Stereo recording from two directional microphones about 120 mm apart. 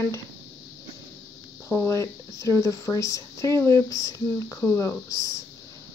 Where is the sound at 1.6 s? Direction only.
20° left (ahead or behind).